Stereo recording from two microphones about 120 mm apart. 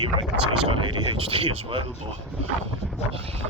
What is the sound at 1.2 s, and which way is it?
Speech, 50° right (ahead or behind).